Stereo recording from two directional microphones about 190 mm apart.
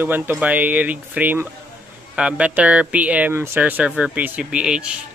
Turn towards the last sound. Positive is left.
turn(degrees=-5)  # may be behind; listen again after turning